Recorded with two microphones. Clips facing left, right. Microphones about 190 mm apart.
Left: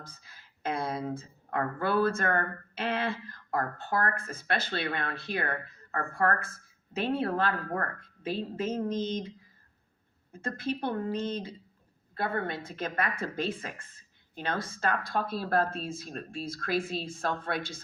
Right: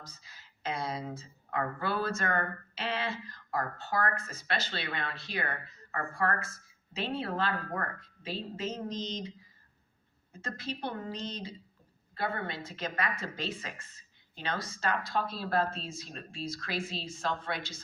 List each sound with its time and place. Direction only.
0.0 s a woman's voice: 55° left (ahead or behind)
10.3 s a woman's voice: 55° left (ahead or behind)